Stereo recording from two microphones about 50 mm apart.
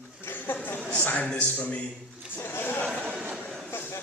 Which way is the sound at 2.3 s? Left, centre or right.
Left.